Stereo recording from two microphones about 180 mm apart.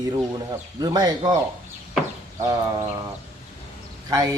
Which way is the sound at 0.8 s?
20° right (ahead or behind).